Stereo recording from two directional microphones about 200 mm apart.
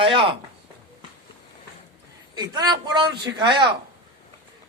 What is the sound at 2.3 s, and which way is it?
A man's voice, 20° right (ahead or behind).